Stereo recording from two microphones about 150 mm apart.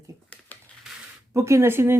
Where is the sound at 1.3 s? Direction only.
20° right (ahead or behind).